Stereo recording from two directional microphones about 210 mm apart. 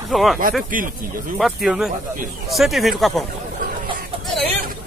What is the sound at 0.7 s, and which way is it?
Speech, 40° right (ahead or behind).